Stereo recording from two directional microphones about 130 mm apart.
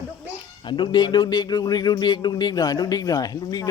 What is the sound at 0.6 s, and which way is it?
Speech, 35° left (ahead or behind).